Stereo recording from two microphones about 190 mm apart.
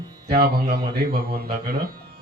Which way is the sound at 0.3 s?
55° right (ahead or behind).